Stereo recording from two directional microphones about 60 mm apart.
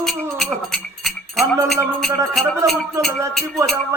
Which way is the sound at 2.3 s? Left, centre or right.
Centre.